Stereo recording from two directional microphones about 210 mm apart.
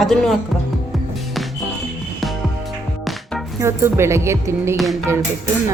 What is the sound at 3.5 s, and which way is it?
Speech, 10° right (ahead or behind).